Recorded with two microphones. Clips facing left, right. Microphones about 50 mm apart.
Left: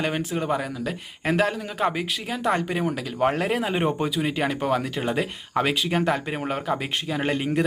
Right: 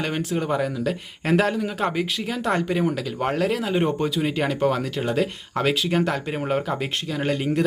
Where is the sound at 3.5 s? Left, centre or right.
Left.